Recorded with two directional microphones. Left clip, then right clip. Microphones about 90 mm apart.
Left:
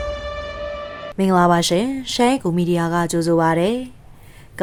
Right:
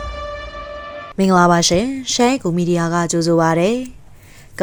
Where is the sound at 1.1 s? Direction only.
35° right (ahead or behind).